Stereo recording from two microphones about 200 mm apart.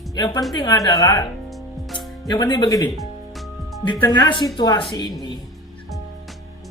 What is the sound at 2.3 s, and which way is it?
Speech, 20° left (ahead or behind).